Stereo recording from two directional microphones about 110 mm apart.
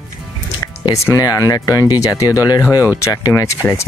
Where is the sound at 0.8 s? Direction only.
30° left (ahead or behind).